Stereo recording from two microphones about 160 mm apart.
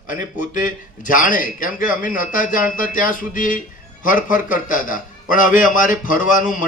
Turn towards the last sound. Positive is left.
turn(degrees=55)  # may be behind; listen again after turning